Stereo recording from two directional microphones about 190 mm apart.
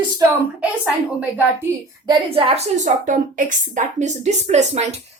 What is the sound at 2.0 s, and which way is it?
A woman's voice, 30° right (ahead or behind).